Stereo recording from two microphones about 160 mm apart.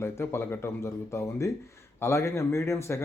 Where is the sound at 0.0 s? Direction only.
15° left (ahead or behind).